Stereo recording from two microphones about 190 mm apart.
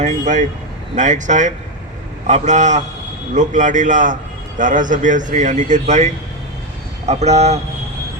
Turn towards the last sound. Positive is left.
turn(degrees=-35)  # may be behind; listen again after turning